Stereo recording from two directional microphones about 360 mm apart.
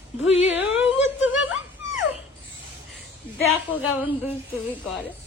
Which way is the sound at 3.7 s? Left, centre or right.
Centre.